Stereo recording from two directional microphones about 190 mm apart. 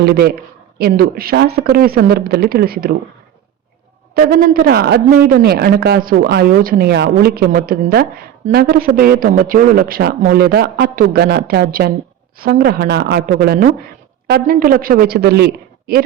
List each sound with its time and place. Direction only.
0.0 s a woman's voice: 55° right (ahead or behind)
4.1 s a woman's voice: 50° right (ahead or behind)